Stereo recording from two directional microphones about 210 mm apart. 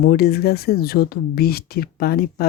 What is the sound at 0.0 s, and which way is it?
Speech, 45° left (ahead or behind).